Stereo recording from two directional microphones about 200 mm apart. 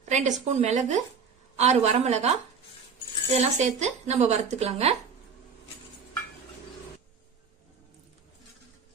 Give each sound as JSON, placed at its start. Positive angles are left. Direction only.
{"t": 0.0, "sound": "a sound", "side_deg": -35}
{"t": 0.4, "sound": "speech", "side_deg": -35}
{"t": 3.3, "sound": "speech", "side_deg": -35}